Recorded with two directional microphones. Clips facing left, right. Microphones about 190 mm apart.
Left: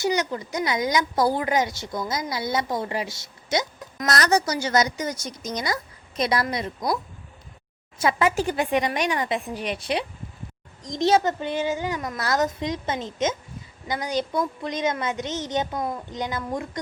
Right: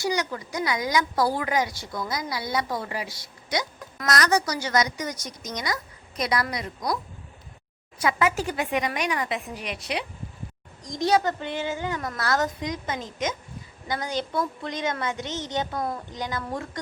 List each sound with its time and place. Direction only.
0.0 s a woman's voice: 20° left (ahead or behind)